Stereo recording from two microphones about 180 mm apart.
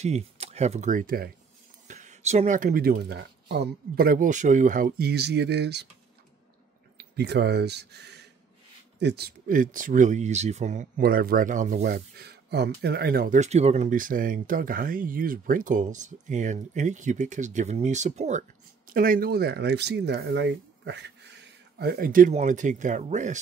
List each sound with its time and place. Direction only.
0.0 s speech: 35° right (ahead or behind); by 1.3 s 55° right (ahead or behind)
1.9 s speech: 40° right (ahead or behind); by 5.9 s 70° right (ahead or behind)
7.0 s speech: 65° right (ahead or behind); by 18.4 s 40° right (ahead or behind)
18.9 s speech: 50° right (ahead or behind)